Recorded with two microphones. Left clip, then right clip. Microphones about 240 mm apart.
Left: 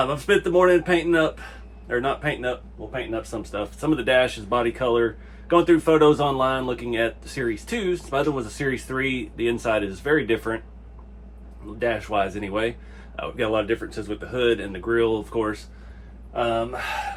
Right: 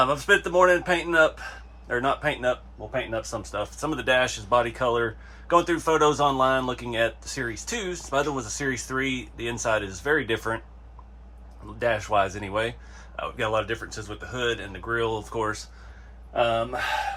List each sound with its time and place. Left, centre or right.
0.0 s speech: centre
11.8 s speech: right
16.3 s speech: right